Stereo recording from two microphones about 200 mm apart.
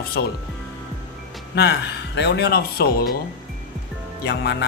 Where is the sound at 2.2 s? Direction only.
55° left (ahead or behind).